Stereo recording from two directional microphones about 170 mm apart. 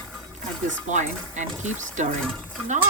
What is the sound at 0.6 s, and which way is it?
Speech, 45° right (ahead or behind).